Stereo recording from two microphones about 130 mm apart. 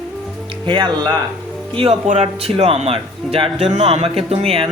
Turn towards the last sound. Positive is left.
turn(degrees=-50)  # may be behind; listen again after turning